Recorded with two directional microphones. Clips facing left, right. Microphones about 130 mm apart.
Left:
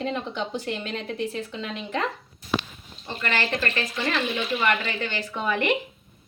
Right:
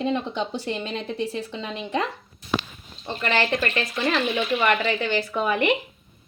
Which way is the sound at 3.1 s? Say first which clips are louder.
Right 4 dB; 25° right (ahead or behind).